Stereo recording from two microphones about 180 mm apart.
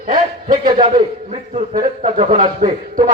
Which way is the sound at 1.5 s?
40° right (ahead or behind).